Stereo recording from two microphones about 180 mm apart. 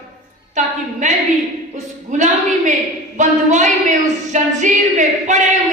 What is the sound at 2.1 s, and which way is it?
Speech, 40° right (ahead or behind).